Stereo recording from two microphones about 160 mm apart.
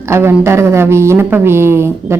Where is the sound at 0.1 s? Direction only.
15° right (ahead or behind).